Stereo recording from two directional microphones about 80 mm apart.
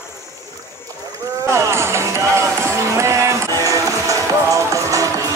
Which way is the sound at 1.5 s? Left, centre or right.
Right.